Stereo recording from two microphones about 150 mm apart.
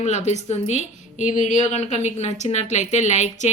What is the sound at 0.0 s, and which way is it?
A woman's voice, 50° left (ahead or behind).